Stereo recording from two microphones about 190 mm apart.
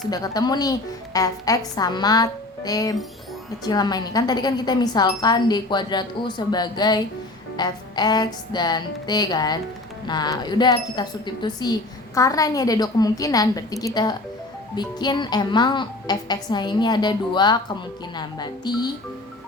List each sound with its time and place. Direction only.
0.1 s a woman's voice: 20° left (ahead or behind)